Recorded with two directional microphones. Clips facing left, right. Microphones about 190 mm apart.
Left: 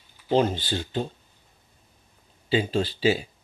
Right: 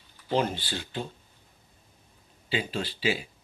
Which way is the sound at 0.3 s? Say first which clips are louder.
Left 5 dB; 25° left (ahead or behind).